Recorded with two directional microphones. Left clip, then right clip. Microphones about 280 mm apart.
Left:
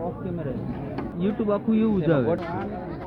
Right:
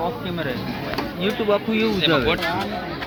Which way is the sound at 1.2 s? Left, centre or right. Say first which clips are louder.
Right 4 dB; left.